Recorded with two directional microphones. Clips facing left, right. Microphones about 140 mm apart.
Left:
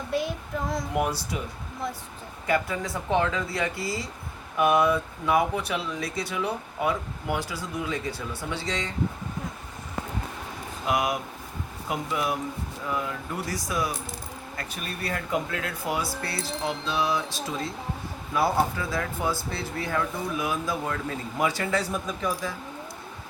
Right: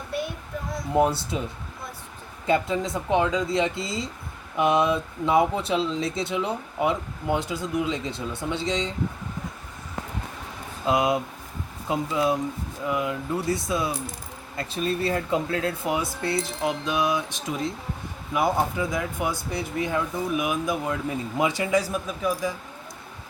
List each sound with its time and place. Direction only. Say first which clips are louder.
0.1 s child singing: left 2 dB; 90° left
0.9 s speech: right 8 dB; 25° right (ahead or behind)
2.5 s speech: right 3 dB; 20° right (ahead or behind)
10.8 s speech: right 4 dB; 25° right (ahead or behind)